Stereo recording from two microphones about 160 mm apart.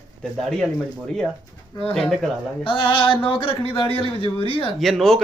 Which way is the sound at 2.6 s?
35° left (ahead or behind).